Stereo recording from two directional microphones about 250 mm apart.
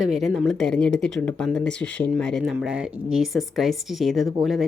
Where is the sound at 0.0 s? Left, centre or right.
Centre.